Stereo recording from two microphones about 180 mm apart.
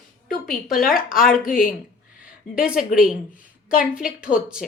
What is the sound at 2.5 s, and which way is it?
A woman's voice, 5° right (ahead or behind).